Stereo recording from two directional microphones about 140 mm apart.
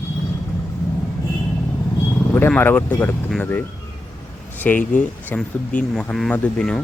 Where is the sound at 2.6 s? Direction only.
15° left (ahead or behind).